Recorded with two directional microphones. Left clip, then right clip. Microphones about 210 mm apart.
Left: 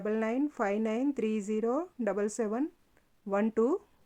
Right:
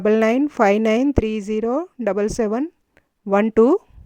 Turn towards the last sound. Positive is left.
turn(degrees=-40)  # may be behind; listen again after turning